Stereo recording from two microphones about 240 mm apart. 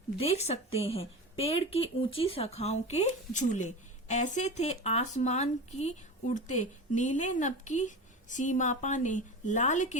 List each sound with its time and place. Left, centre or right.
0.2 s speech: left